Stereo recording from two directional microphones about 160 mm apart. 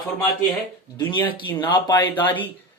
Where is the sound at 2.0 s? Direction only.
10° left (ahead or behind).